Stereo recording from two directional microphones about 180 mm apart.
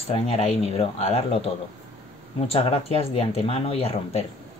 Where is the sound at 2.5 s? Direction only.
35° left (ahead or behind).